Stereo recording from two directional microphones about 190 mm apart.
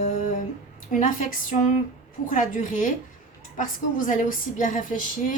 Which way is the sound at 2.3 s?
40° left (ahead or behind).